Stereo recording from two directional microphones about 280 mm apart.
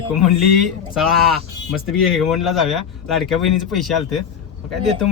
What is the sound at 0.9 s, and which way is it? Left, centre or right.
Speech, centre.